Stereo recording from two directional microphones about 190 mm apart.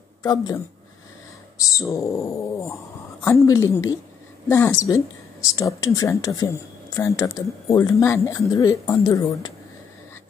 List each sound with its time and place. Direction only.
0.2 s speech: 20° left (ahead or behind)
1.6 s speech: 15° left (ahead or behind)